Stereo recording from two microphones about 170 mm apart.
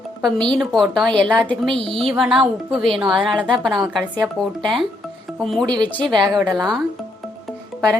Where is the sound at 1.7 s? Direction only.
35° right (ahead or behind).